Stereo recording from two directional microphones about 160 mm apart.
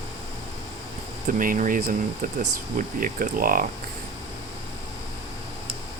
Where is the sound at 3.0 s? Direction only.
60° right (ahead or behind).